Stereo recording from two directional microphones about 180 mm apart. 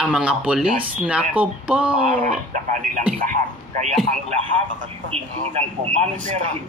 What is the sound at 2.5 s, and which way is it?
A man's voice, 45° right (ahead or behind).